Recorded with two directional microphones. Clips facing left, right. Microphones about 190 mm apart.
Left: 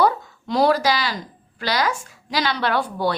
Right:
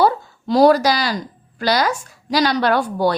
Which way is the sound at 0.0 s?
35° right (ahead or behind).